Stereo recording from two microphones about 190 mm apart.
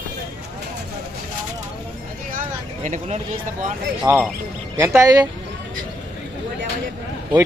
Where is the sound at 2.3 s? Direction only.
40° right (ahead or behind).